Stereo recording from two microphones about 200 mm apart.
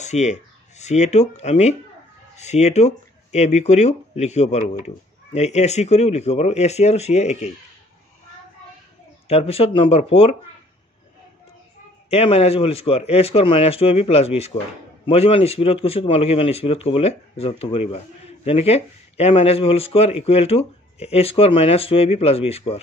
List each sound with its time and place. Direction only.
0.0 s speech: 35° left (ahead or behind)
9.3 s speech: 30° left (ahead or behind)
12.1 s speech: 30° left (ahead or behind)